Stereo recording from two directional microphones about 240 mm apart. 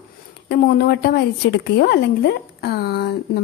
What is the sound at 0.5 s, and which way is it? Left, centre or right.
A woman's voice, left.